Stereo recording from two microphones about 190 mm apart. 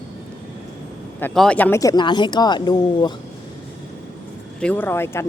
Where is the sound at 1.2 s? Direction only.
5° left (ahead or behind); by 3.1 s 25° left (ahead or behind).